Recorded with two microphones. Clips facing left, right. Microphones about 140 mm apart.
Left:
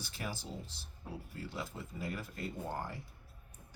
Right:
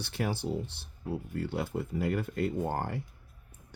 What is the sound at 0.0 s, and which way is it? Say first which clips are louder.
Speech: right 10 dB; 70° right (ahead or behind).